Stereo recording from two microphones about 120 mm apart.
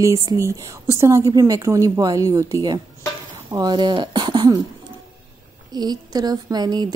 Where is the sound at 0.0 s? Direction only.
25° right (ahead or behind).